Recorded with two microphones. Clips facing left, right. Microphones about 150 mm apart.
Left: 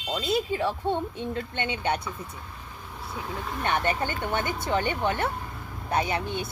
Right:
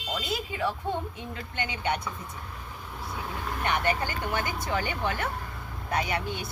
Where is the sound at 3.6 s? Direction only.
30° left (ahead or behind).